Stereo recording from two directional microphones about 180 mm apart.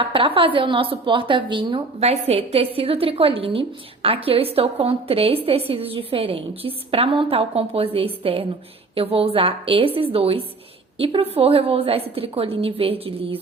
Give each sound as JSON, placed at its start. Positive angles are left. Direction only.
{"t": 0.0, "sound": "a woman's voice", "side_deg": -30}